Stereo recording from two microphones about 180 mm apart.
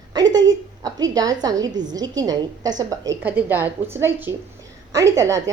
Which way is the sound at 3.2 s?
10° right (ahead or behind).